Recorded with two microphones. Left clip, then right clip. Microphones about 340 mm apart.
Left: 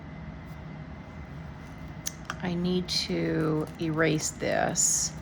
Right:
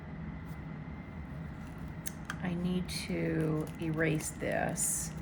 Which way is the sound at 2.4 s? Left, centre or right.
Centre.